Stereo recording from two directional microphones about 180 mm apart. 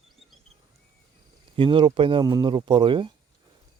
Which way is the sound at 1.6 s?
25° right (ahead or behind).